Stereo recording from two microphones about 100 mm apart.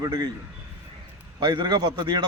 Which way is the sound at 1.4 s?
50° right (ahead or behind).